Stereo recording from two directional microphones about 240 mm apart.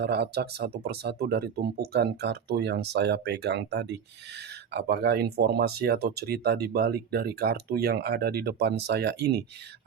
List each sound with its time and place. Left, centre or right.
0.0 s speech: right